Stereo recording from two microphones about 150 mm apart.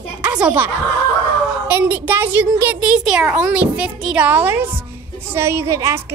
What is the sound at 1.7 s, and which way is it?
A woman's voice, 10° right (ahead or behind).